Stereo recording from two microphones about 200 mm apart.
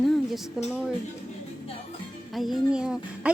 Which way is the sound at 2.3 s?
Centre (ahead or behind).